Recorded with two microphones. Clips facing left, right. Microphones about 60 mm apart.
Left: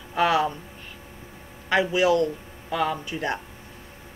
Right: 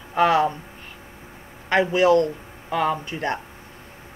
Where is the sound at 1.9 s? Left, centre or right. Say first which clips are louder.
Right 4 dB; right.